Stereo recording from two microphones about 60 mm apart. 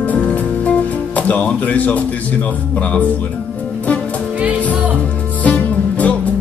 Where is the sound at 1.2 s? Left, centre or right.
Left.